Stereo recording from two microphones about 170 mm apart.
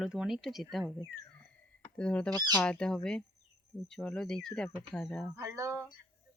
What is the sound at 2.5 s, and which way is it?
Speech, 5° left (ahead or behind).